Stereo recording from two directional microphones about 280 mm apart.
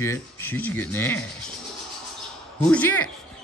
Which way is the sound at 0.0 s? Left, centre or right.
Centre.